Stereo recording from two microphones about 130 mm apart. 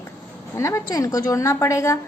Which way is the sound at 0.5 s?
20° left (ahead or behind).